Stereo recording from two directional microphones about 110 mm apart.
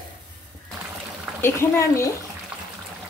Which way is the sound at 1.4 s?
25° left (ahead or behind).